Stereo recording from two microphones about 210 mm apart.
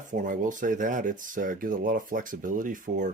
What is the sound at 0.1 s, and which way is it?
Speech, 40° right (ahead or behind).